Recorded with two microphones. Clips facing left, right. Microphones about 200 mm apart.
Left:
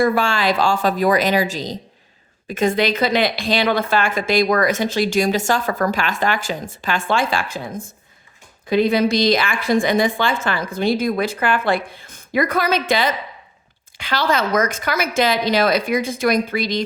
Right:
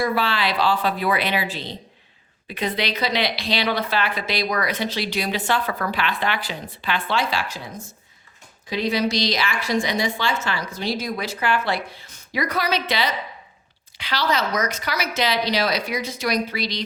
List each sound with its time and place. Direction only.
0.0 s a woman's voice: 45° left (ahead or behind)